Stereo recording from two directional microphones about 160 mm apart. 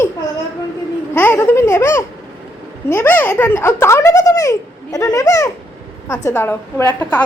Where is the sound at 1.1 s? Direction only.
10° left (ahead or behind).